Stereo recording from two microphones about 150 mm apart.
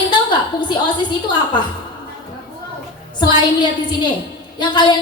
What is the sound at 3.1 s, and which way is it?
A woman's voice, 30° left (ahead or behind).